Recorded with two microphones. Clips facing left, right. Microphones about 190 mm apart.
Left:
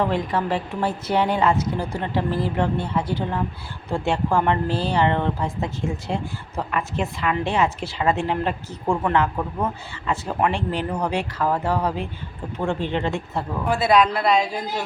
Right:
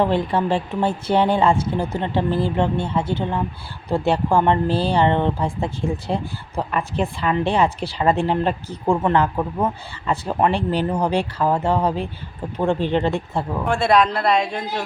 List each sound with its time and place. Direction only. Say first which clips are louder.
0.0 s speech: right 3 dB; 30° right (ahead or behind)
3.8 s a woman's voice: right 3 dB; 35° right (ahead or behind)
13.7 s speech: even; 5° left (ahead or behind)